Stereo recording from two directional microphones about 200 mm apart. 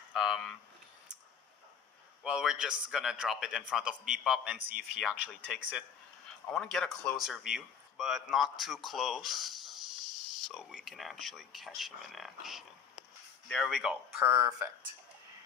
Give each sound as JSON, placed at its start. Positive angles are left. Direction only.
{"t": 0.1, "sound": "speech", "side_deg": 0}
{"t": 2.2, "sound": "speech", "side_deg": -5}
{"t": 14.1, "sound": "speech", "side_deg": -15}